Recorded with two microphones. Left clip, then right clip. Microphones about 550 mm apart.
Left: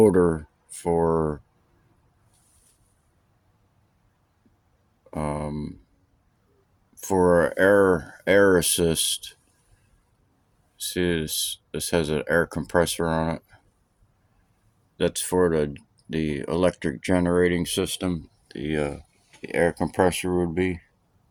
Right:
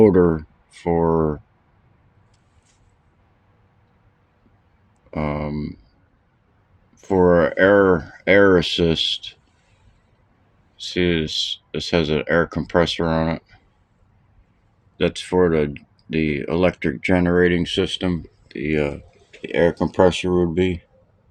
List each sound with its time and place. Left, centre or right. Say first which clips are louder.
0.0 s speech: right 4 dB; left
5.1 s speech: right 4 dB; left
6.9 s speech: right 4 dB; left
10.8 s speech: right 5 dB; left
14.9 s speech: right 4 dB; left